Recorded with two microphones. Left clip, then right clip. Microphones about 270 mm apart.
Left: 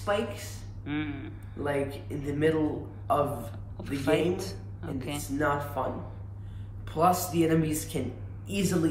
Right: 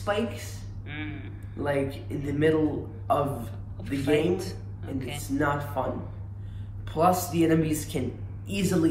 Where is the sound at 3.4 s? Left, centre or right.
Left.